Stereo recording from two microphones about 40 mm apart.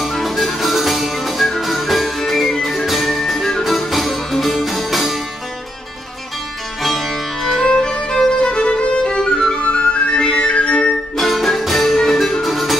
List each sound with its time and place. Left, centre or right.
0.1 s music: centre
6.8 s music: centre
7.6 s music: centre
9.6 s music: left
11.1 s music: centre